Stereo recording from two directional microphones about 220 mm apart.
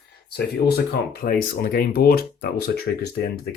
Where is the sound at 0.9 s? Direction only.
40° left (ahead or behind).